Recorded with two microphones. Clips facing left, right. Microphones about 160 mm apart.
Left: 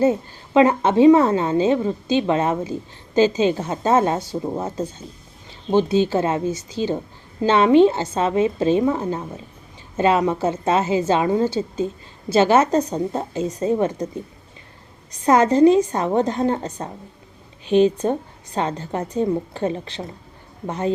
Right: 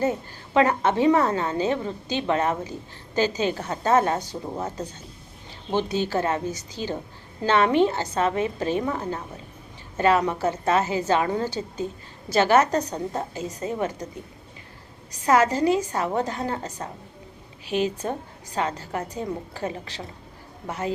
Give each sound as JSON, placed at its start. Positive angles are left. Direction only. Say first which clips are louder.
{"t": 0.0, "sound": "a woman's voice", "louder": "left 7 dB", "side_deg": 25}
{"t": 15.2, "sound": "a woman's voice", "louder": "left 6 dB", "side_deg": 30}